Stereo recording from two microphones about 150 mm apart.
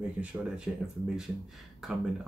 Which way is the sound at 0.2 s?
5° right (ahead or behind).